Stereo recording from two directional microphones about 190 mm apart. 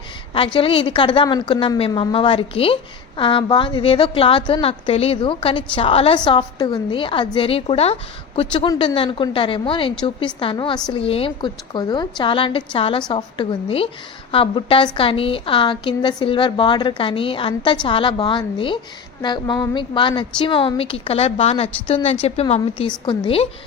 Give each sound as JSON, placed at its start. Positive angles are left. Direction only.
{"t": 0.3, "sound": "a woman's voice", "side_deg": 30}